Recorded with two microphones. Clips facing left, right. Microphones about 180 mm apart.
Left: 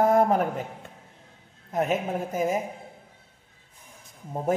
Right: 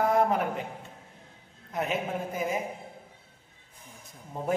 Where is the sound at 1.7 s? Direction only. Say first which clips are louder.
Left 5 dB; 45° left (ahead or behind).